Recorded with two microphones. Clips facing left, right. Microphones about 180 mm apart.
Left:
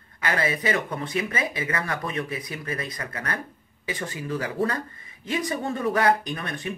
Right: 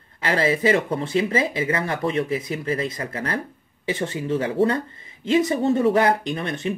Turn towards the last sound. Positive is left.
turn(degrees=-25)  # may be behind; listen again after turning